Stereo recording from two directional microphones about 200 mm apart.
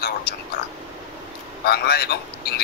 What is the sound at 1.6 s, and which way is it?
Speech, 50° left (ahead or behind).